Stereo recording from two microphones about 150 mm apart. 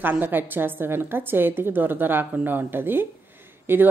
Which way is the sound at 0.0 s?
15° right (ahead or behind).